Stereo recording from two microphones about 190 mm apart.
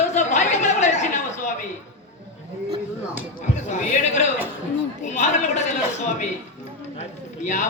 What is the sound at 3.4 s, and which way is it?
A man's voice, 45° left (ahead or behind).